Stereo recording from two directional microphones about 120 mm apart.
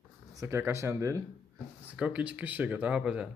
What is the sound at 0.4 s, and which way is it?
Speech, 20° right (ahead or behind).